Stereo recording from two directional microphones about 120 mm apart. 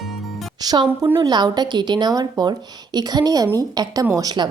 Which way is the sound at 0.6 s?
35° right (ahead or behind).